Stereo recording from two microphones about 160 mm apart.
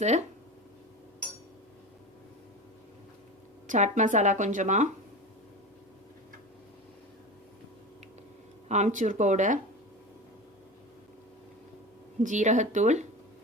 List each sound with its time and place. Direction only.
0.0 s speech: 45° right (ahead or behind)
3.7 s speech: 50° right (ahead or behind)
8.6 s speech: 45° right (ahead or behind)
12.2 s speech: 50° right (ahead or behind)